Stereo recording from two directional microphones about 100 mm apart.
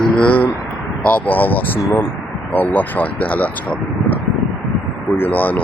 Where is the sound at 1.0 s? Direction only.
15° left (ahead or behind).